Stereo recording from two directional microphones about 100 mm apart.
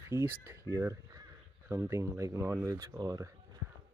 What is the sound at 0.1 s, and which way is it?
Speech, 25° right (ahead or behind).